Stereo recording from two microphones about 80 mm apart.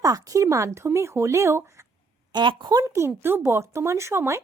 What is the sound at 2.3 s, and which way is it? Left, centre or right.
Speech, right.